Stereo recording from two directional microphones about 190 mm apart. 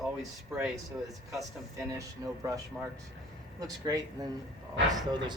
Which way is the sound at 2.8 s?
Centre (ahead or behind).